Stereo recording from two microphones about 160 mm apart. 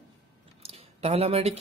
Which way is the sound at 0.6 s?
40° right (ahead or behind).